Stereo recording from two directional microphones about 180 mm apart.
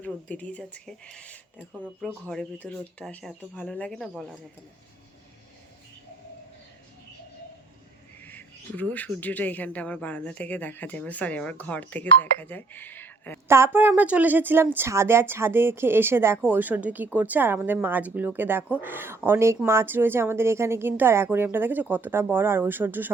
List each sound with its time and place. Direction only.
0.0 s speech: 5° left (ahead or behind)
8.2 s speech: 10° left (ahead or behind)
13.5 s a woman's voice: 15° right (ahead or behind)